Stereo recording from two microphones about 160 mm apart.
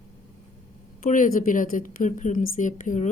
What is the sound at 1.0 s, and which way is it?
A woman's voice, 55° left (ahead or behind).